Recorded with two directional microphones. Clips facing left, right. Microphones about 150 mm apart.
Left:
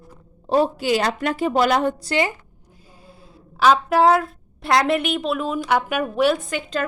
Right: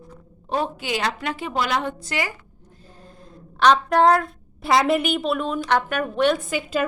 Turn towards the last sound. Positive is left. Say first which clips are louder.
# right 1 dB
turn(degrees=-5)  # may be behind; listen again after turning